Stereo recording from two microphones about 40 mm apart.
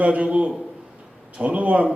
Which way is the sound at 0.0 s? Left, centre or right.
Right.